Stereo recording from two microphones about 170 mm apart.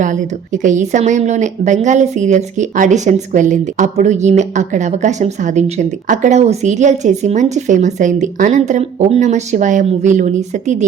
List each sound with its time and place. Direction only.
0.0 s a woman's voice: 45° right (ahead or behind)